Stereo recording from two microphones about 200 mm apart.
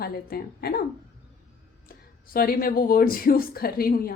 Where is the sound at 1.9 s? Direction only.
45° left (ahead or behind).